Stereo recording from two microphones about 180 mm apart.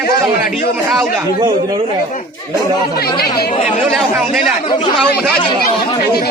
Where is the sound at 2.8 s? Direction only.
60° left (ahead or behind).